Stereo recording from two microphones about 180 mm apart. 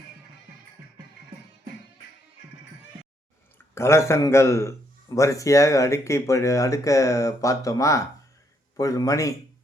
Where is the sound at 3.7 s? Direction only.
15° left (ahead or behind).